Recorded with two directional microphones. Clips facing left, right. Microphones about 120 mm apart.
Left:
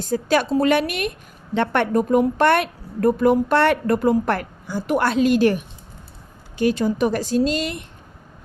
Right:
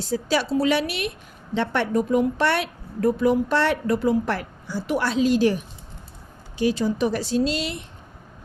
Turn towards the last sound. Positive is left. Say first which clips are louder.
# left 3 dB
turn(degrees=50)  # may be behind; listen again after turning